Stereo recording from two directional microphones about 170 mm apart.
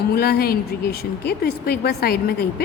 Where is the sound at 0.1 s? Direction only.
65° left (ahead or behind).